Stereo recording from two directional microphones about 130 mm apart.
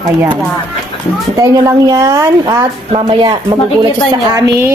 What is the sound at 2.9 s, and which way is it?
Speech, 45° right (ahead or behind).